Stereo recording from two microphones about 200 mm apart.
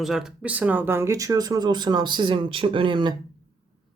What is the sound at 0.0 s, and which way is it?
Speech, centre (ahead or behind).